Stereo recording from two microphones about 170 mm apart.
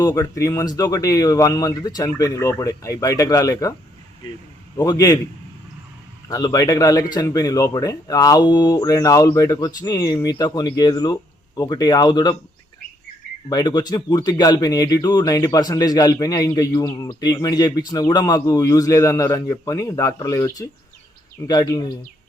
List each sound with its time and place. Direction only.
0.0 s speech: 20° left (ahead or behind)
4.8 s speech: 20° left (ahead or behind)
6.2 s speech: 20° left (ahead or behind)
13.5 s speech: 25° left (ahead or behind)